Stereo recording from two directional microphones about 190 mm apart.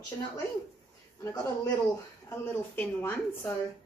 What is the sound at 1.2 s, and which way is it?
A man's voice, 20° left (ahead or behind).